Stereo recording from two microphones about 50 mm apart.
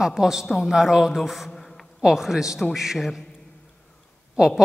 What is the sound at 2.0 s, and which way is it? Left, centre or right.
A woman's voice, centre.